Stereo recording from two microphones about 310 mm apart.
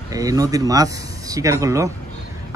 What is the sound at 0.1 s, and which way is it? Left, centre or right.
Speech, centre.